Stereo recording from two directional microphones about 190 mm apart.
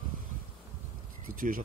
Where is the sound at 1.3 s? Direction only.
45° right (ahead or behind).